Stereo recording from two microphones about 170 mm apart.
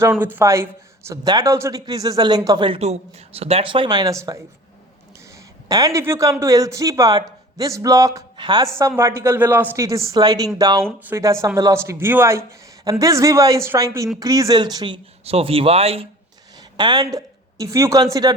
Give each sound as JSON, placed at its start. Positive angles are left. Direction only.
{"t": 0.0, "sound": "speech", "side_deg": -10}
{"t": 5.6, "sound": "speech", "side_deg": -20}
{"t": 16.7, "sound": "speech", "side_deg": -25}